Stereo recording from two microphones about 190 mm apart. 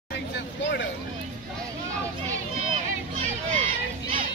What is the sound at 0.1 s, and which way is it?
Vehicle, 65° left (ahead or behind).